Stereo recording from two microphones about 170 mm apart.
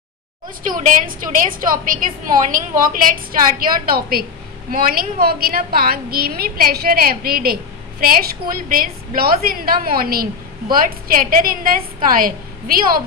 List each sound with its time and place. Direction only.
0.7 s a woman's voice: 50° right (ahead or behind)
8.6 s a woman's voice: 60° right (ahead or behind)